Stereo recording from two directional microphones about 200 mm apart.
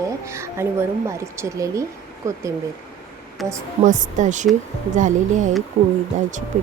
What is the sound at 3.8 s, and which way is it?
Speech, 40° right (ahead or behind).